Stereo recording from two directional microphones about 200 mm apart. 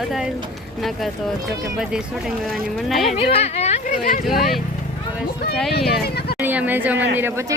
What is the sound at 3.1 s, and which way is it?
Speech, 30° left (ahead or behind).